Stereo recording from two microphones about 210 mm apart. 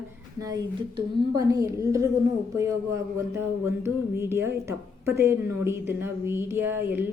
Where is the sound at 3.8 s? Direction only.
10° right (ahead or behind).